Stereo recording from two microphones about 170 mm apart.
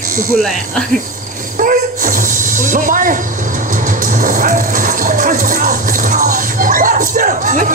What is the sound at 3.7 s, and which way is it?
Music, 50° right (ahead or behind).